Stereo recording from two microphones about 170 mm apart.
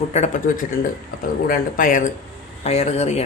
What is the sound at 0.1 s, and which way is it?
Speech, 45° left (ahead or behind).